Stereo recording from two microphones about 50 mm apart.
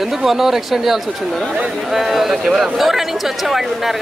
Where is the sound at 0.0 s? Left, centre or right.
Centre.